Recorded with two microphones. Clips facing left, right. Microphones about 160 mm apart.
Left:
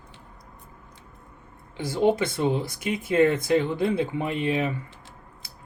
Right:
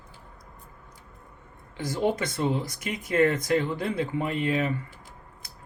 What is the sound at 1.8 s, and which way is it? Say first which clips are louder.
Speech: left 4 dB; 25° left (ahead or behind).